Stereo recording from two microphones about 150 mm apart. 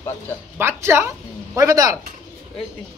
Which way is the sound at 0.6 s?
15° right (ahead or behind).